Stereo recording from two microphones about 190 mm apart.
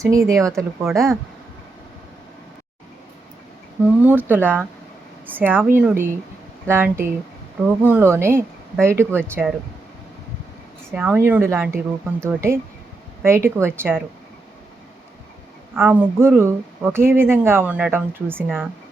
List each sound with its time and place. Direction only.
0.0 s speech: 15° right (ahead or behind)
4.0 s speech: 10° right (ahead or behind)
10.9 s speech: 5° right (ahead or behind)
15.7 s speech: 10° right (ahead or behind)